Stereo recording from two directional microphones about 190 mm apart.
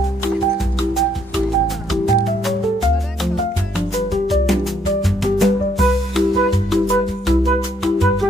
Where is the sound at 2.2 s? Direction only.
Centre (ahead or behind).